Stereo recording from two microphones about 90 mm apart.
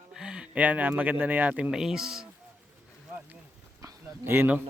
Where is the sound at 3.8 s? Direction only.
25° right (ahead or behind).